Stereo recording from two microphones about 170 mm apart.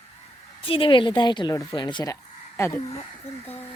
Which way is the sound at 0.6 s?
30° left (ahead or behind).